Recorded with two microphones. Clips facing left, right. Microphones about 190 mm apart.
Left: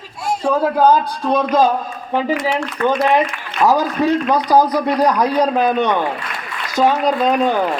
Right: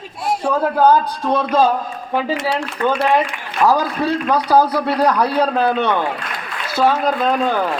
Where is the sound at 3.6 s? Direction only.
15° left (ahead or behind).